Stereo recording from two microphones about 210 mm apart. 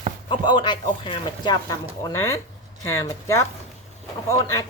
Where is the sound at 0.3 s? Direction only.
20° left (ahead or behind).